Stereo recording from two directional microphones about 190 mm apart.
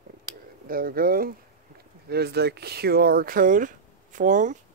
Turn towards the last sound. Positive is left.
turn(degrees=-40)  # may be behind; listen again after turning